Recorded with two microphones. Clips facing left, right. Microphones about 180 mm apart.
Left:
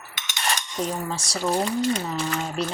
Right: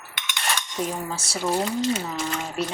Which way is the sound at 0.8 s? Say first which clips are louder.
Left 1 dB; 5° right (ahead or behind).